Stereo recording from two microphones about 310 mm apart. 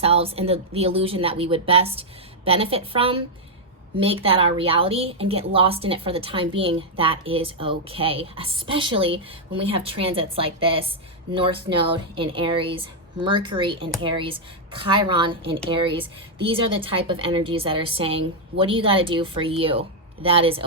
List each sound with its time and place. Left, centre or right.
0.0 s speech: centre